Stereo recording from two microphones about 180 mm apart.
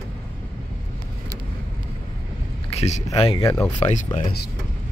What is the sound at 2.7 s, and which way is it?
Speech, 35° left (ahead or behind).